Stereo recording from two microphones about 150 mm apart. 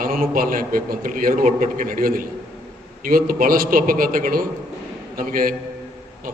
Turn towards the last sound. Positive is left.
turn(degrees=-70)  # may be behind; listen again after turning